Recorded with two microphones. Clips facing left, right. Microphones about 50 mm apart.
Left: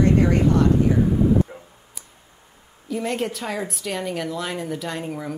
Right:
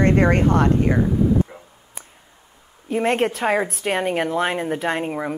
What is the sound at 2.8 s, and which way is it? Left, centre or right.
A woman's voice, right.